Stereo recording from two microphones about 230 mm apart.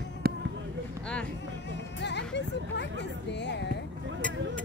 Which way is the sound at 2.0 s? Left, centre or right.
Left.